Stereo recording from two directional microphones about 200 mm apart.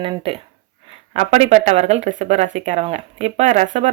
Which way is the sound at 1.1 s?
35° right (ahead or behind).